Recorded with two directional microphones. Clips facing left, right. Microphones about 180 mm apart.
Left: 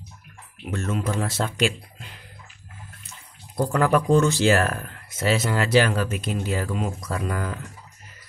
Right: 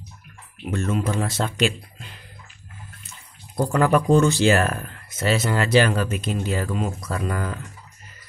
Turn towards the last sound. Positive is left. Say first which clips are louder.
# right 1 dB
turn(degrees=5)  # may be behind; listen again after turning